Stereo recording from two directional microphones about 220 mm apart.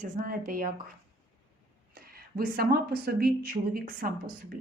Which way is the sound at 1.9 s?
40° right (ahead or behind).